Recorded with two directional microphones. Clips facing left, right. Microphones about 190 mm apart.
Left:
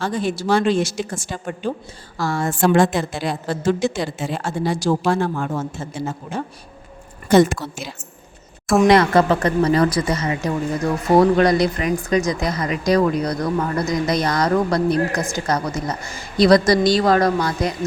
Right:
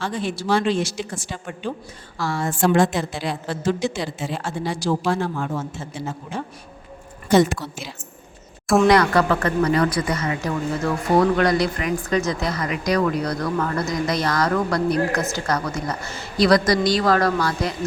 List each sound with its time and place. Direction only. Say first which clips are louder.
0.0 s a woman's voice: left 4 dB; 40° left (ahead or behind)
8.8 s speech: left 3 dB; 25° left (ahead or behind)